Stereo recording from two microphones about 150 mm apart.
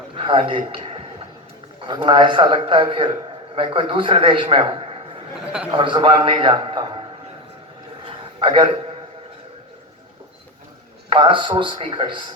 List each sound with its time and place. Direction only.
0.1 s a man's voice: 35° right (ahead or behind)
8.0 s a sound: 35° right (ahead or behind)
11.1 s a man's voice: 35° right (ahead or behind)